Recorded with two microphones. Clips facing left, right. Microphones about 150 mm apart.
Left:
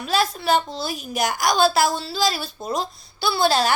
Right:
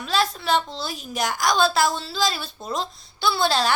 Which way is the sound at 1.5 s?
5° left (ahead or behind).